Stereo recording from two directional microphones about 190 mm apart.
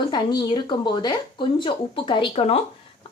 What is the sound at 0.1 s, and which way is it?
A woman's voice, 20° left (ahead or behind).